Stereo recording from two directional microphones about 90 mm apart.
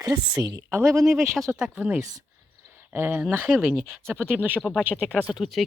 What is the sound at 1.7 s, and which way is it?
Speech, 15° right (ahead or behind).